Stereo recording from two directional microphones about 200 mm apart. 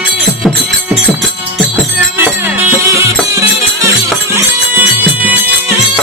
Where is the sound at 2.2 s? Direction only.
10° right (ahead or behind).